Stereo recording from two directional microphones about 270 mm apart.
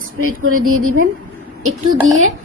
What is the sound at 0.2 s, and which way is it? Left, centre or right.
Speech, right.